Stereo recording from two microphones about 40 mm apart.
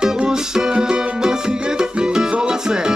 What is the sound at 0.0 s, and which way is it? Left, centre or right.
Music, centre.